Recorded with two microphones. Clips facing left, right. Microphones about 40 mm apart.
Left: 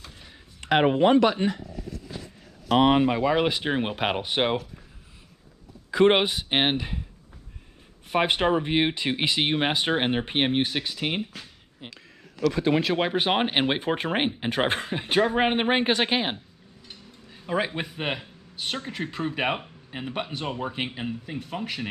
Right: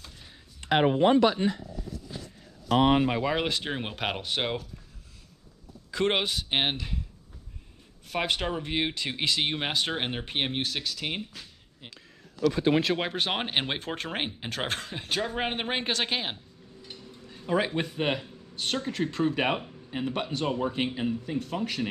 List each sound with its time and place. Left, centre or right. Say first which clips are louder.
0.6 s speech: left 2 dB; left
1.2 s speech: left 1 dB; left
2.7 s speech: left 3 dB; left
3.1 s speech: left 5 dB; centre
3.4 s speech: left 6 dB; centre
5.9 s speech: left 7 dB; centre
8.1 s speech: left 7 dB; left
12.4 s speech: left 1 dB; left
12.7 s speech: left 3 dB; centre
16.8 s speech: right 1 dB; centre